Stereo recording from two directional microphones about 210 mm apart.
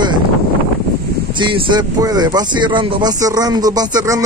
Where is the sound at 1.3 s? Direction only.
25° right (ahead or behind).